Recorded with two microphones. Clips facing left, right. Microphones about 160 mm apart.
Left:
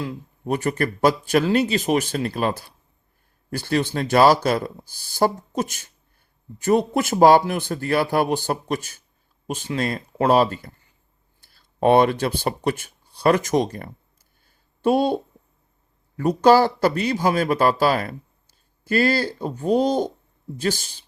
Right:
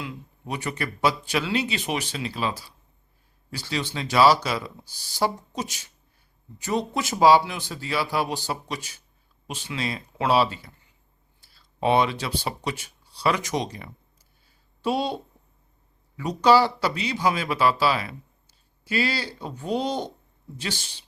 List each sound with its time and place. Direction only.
0.0 s speech: 45° left (ahead or behind)
14.4 s a sound: 50° left (ahead or behind)
16.1 s speech: 50° left (ahead or behind)